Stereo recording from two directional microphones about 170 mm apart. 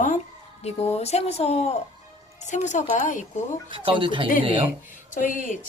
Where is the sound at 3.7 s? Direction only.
30° right (ahead or behind).